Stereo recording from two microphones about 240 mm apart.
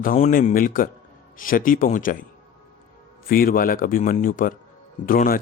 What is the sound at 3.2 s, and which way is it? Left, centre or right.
A man's voice, left.